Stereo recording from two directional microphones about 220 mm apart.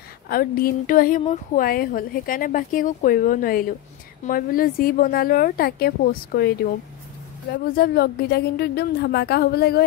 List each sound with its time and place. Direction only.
0.3 s speech: 40° left (ahead or behind)
7.5 s a woman's voice: 45° left (ahead or behind)